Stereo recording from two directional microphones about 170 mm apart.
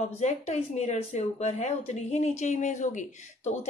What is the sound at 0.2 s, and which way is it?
Speech, 40° left (ahead or behind).